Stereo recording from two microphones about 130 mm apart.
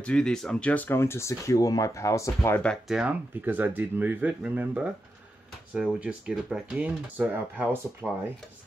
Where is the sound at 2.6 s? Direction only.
Centre (ahead or behind).